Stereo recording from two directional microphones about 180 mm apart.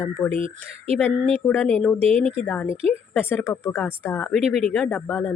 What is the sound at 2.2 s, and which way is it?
Speech, 30° right (ahead or behind).